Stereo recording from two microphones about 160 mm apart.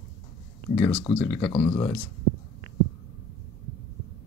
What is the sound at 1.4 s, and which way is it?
Speech, 25° left (ahead or behind).